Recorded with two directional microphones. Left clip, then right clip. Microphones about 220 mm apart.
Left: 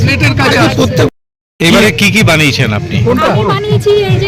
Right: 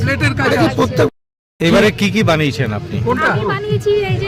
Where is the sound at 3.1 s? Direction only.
Centre (ahead or behind).